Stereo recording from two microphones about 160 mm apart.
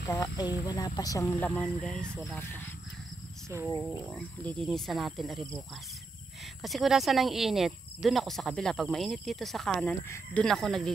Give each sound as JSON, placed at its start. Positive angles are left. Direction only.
{"t": 0.0, "sound": "speech", "side_deg": 20}
{"t": 1.5, "sound": "speech", "side_deg": 5}
{"t": 3.4, "sound": "speech", "side_deg": -15}
{"t": 3.8, "sound": "speech", "side_deg": 5}
{"t": 6.6, "sound": "speech", "side_deg": 0}
{"t": 10.0, "sound": "speech", "side_deg": 15}
{"t": 10.4, "sound": "speech", "side_deg": 0}